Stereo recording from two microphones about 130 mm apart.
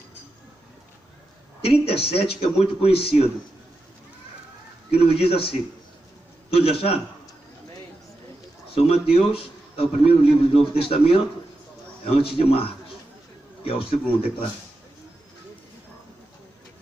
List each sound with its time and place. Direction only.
1.6 s speech: 50° left (ahead or behind)
4.9 s speech: 50° left (ahead or behind)
6.5 s speech: 45° left (ahead or behind)
8.7 s speech: 50° left (ahead or behind)